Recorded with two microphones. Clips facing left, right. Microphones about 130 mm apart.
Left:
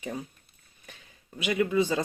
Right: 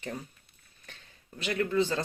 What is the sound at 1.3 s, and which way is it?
Speech, 10° left (ahead or behind).